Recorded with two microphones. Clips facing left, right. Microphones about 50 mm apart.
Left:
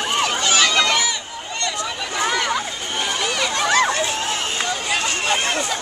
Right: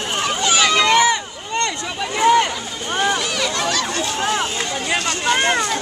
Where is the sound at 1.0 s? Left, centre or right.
Right.